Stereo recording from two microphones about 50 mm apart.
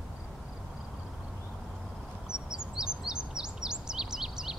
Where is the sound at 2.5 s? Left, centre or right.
Centre.